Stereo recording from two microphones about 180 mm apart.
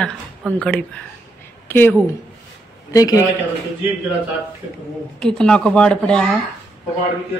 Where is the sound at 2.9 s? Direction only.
20° left (ahead or behind).